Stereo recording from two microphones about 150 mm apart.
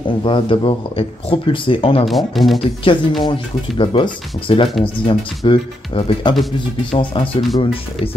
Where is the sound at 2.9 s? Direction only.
35° left (ahead or behind).